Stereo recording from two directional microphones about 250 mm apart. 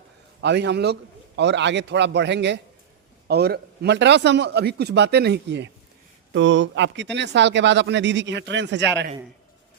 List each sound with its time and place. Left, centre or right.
0.4 s speech: right